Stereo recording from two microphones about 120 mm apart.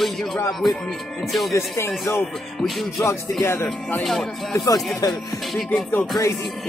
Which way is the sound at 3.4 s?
20° left (ahead or behind).